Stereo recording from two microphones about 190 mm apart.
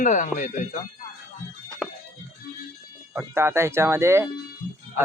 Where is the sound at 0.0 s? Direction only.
40° left (ahead or behind).